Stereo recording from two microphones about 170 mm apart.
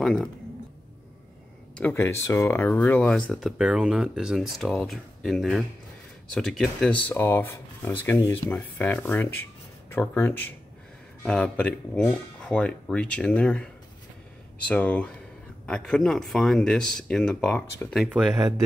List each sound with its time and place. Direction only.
0.0 s speech: centre (ahead or behind)
1.8 s speech: 10° left (ahead or behind)
14.7 s speech: 10° left (ahead or behind)